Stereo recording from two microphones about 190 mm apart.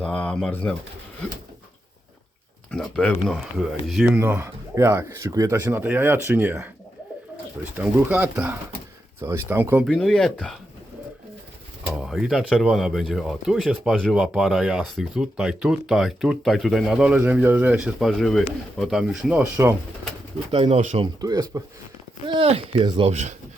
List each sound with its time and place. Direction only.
0.0 s speech: 5° left (ahead or behind)
2.7 s speech: 5° left (ahead or behind)
7.8 s speech: 10° right (ahead or behind)
9.9 s speech: centre (ahead or behind)
11.9 s speech: centre (ahead or behind)
20.5 s speech: 30° right (ahead or behind)
21.2 s speech: 20° right (ahead or behind)
22.3 s speech: 30° right (ahead or behind)